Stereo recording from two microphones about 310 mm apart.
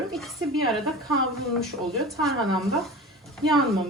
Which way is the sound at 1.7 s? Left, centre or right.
Right.